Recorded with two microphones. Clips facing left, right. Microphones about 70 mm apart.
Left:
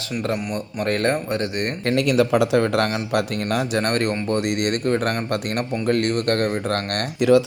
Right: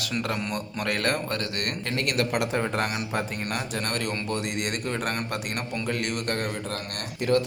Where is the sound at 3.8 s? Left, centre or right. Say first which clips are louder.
Left 8 dB; left.